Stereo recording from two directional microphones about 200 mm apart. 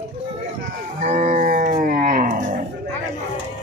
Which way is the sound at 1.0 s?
35° right (ahead or behind).